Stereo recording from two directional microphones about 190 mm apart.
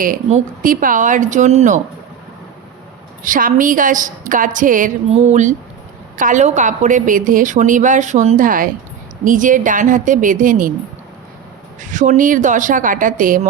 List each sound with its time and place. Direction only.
0.0 s a woman's voice: 40° right (ahead or behind)
3.2 s a woman's voice: 45° right (ahead or behind)
11.8 s a woman's voice: 40° right (ahead or behind)